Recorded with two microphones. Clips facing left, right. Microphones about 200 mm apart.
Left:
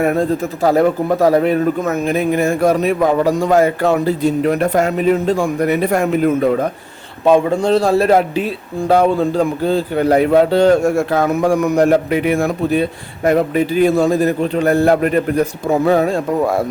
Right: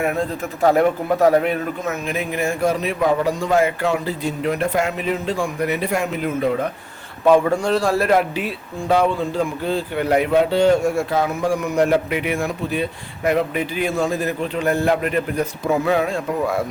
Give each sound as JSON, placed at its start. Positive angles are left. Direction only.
{"t": 0.0, "sound": "a man's voice", "side_deg": 40}
{"t": 7.3, "sound": "a man's voice", "side_deg": 25}
{"t": 8.9, "sound": "a man's voice", "side_deg": 40}